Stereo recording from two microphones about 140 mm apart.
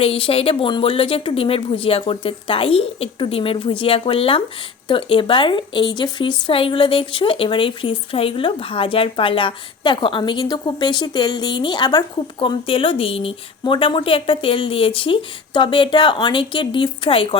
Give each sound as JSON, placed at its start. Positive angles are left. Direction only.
{"t": 0.0, "sound": "speech", "side_deg": 40}